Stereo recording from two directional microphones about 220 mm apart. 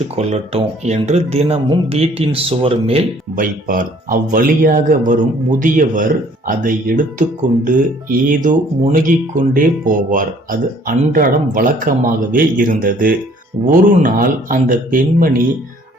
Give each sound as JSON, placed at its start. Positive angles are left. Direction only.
{"t": 0.2, "sound": "speech", "side_deg": -30}
{"t": 3.3, "sound": "speech", "side_deg": -40}